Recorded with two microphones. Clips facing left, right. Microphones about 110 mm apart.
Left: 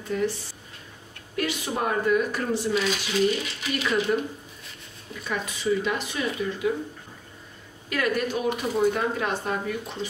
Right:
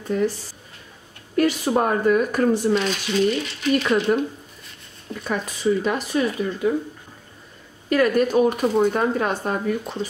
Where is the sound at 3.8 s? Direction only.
45° right (ahead or behind).